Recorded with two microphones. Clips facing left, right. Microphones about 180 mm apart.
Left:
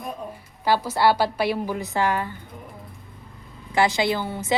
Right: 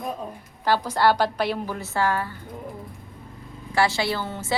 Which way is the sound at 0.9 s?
10° left (ahead or behind).